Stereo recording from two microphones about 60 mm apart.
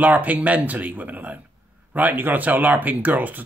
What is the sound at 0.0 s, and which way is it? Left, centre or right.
Speech, right.